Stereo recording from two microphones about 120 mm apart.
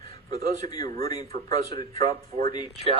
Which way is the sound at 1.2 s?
65° right (ahead or behind).